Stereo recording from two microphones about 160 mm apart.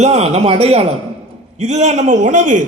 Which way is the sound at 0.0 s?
40° right (ahead or behind).